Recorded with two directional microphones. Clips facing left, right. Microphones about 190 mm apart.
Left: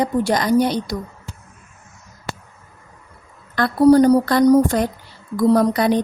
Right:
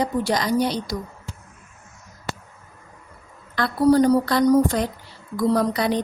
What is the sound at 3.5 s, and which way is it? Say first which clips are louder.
A woman's voice: left 5 dB; 45° left (ahead or behind).